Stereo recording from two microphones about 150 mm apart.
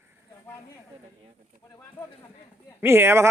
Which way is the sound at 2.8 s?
15° right (ahead or behind).